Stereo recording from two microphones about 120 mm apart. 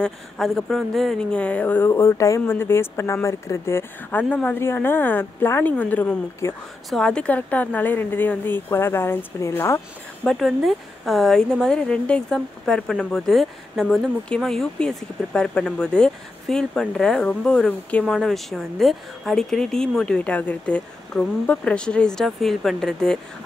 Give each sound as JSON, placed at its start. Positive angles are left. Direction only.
{"t": 0.0, "sound": "speech", "side_deg": 5}
{"t": 10.2, "sound": "a woman's voice", "side_deg": 5}